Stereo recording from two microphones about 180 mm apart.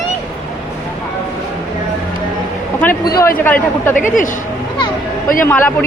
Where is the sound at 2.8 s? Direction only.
10° left (ahead or behind).